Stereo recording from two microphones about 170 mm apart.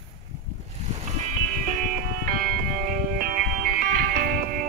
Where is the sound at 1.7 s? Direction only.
50° right (ahead or behind).